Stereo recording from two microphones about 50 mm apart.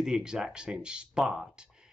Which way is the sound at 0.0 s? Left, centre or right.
Centre.